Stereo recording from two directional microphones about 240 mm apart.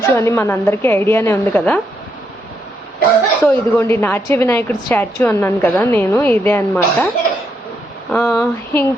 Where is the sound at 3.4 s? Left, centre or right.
Centre.